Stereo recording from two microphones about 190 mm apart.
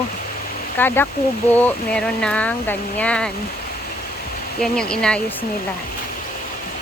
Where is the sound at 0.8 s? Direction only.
10° left (ahead or behind).